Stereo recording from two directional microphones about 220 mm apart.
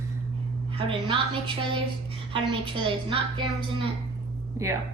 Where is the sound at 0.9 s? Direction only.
20° right (ahead or behind).